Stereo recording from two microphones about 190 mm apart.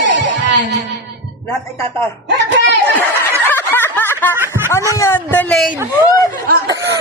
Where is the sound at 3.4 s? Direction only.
10° left (ahead or behind).